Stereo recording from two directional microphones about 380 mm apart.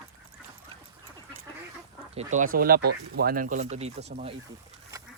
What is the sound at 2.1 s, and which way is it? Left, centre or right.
Speech, centre.